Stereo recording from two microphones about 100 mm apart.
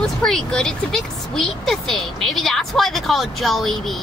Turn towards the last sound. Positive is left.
turn(degrees=0)  # may be behind; listen again after turning